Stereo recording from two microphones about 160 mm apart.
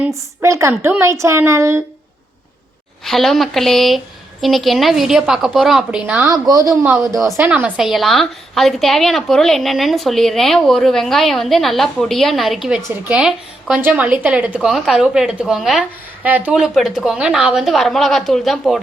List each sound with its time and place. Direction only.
0.0 s a woman's voice: 20° right (ahead or behind)
3.0 s a woman's voice: centre (ahead or behind)
6.2 s speech: 25° right (ahead or behind)
6.8 s a woman's voice: 5° right (ahead or behind)